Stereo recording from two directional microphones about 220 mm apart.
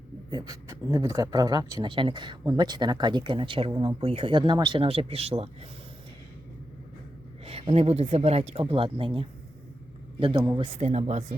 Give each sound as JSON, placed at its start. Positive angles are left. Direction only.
{"t": 0.3, "sound": "speech", "side_deg": -15}
{"t": 7.4, "sound": "speech", "side_deg": -25}
{"t": 10.8, "sound": "speech", "side_deg": -30}